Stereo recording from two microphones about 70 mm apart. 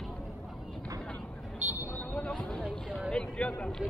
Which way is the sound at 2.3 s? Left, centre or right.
Centre.